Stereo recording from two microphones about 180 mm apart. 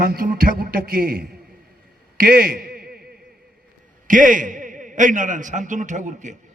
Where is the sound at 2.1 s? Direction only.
55° right (ahead or behind).